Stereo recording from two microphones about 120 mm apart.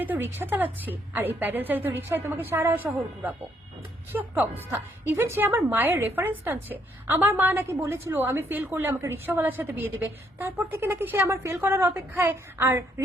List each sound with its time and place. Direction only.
0.0 s a woman's voice: 15° right (ahead or behind)